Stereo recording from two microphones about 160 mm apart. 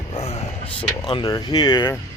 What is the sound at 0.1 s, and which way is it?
Vehicle, 35° left (ahead or behind).